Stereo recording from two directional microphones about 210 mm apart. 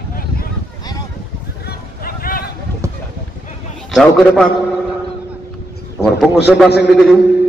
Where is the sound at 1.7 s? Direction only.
45° left (ahead or behind).